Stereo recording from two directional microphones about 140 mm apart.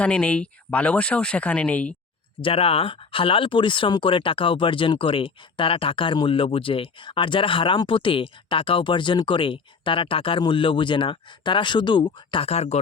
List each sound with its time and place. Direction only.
0.0 s speech: 10° left (ahead or behind)
2.4 s speech: 40° left (ahead or behind)